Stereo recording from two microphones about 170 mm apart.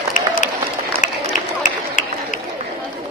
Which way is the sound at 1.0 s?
45° left (ahead or behind).